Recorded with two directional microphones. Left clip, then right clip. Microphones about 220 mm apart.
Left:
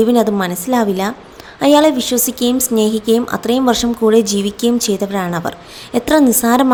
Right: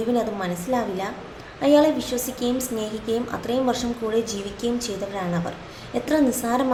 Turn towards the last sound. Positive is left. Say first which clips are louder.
# left 9 dB
turn(degrees=40)  # may be behind; listen again after turning